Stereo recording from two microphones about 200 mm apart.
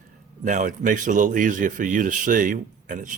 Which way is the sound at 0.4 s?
40° right (ahead or behind).